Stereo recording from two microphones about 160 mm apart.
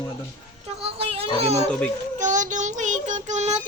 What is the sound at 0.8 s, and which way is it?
Speech, 40° right (ahead or behind).